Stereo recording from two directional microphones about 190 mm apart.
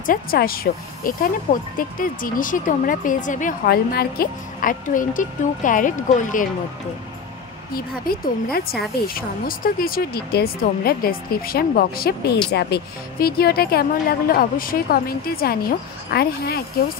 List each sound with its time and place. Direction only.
0.0 s speech: 50° left (ahead or behind)
7.7 s speech: 50° left (ahead or behind)